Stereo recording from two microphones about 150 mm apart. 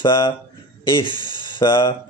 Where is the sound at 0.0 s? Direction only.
30° left (ahead or behind).